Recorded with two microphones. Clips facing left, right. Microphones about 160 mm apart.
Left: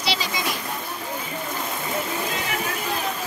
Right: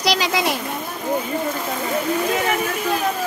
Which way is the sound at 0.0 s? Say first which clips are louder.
Right 7 dB; 80° right.